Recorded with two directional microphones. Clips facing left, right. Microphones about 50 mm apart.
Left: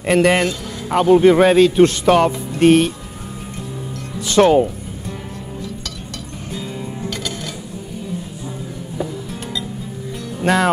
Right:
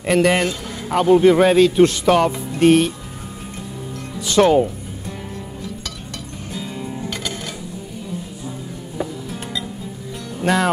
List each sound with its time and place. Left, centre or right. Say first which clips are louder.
0.0 s speech: left 2 dB; left
4.2 s speech: left 2 dB; left
7.1 s music: left 1 dB; right
10.4 s music: left 2 dB; left